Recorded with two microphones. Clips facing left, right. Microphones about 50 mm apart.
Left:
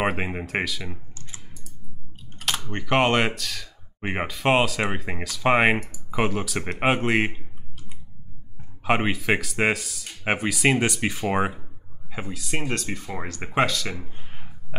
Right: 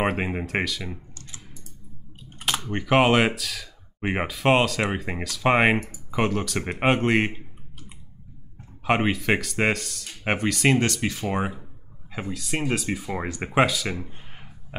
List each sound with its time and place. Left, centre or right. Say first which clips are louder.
0.0 s speech: even; centre
1.1 s typing: even; left
2.4 s speech: right 1 dB; centre
8.8 s speech: even; centre; by 11.6 s left
12.1 s speech: right 1 dB; centre